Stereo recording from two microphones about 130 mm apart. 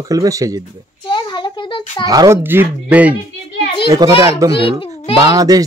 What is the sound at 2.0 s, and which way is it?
Speech, 30° right (ahead or behind).